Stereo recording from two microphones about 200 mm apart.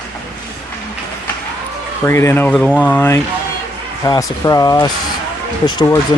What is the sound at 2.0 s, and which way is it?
Speech, 15° left (ahead or behind).